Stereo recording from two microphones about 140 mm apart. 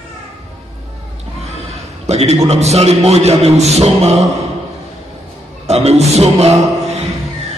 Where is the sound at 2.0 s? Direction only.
50° right (ahead or behind).